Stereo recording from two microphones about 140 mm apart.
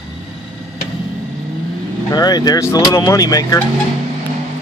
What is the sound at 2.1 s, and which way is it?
Speech, 30° left (ahead or behind).